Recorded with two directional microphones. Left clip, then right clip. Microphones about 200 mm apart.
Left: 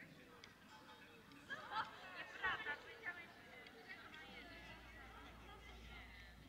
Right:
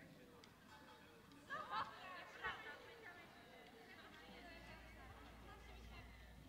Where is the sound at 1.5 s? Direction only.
30° right (ahead or behind).